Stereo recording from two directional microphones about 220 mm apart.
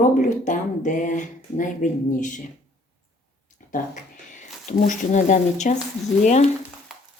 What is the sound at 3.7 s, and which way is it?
Speech, 35° left (ahead or behind).